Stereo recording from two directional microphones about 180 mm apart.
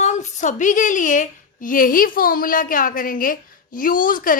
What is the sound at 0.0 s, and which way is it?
A woman's voice, 40° left (ahead or behind).